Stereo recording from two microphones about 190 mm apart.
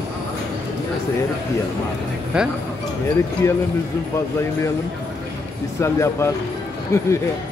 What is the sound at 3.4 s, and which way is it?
Speech, 15° left (ahead or behind).